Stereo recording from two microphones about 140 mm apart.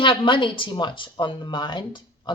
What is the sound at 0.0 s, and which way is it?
Speech, 35° left (ahead or behind).